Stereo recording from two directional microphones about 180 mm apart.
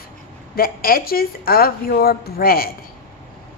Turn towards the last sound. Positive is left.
turn(degrees=55)  # may be behind; listen again after turning